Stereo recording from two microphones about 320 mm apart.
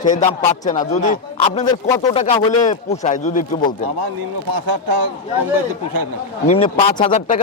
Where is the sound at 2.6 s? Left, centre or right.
Left.